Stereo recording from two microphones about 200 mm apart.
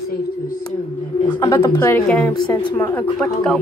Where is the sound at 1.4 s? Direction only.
15° left (ahead or behind).